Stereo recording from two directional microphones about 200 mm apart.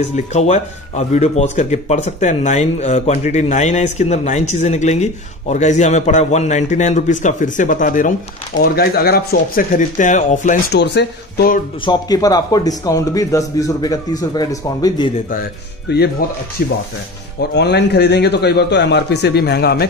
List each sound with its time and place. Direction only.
0.1 s speech: 35° left (ahead or behind)
10.7 s a man's voice: 55° left (ahead or behind)
11.8 s a man's voice: 20° left (ahead or behind)
15.9 s a man's voice: 55° left (ahead or behind)